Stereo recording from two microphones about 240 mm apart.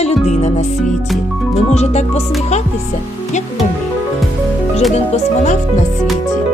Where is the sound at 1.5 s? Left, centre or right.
Left.